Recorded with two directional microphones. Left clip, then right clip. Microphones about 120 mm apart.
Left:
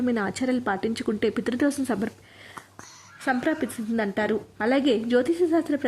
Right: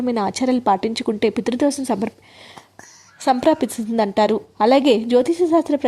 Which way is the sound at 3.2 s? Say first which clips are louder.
Right 9 dB; 35° right (ahead or behind).